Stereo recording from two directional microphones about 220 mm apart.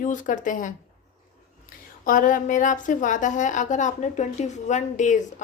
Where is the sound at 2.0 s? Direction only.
35° left (ahead or behind).